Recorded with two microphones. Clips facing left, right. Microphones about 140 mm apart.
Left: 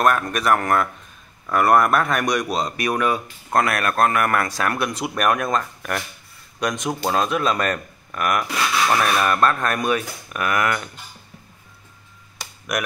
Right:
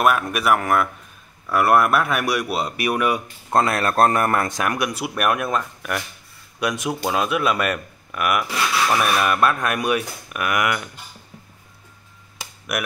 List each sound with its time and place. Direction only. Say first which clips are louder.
0.0 s speech: even; 5° right (ahead or behind)
3.5 s speech: right 1 dB; 25° right (ahead or behind)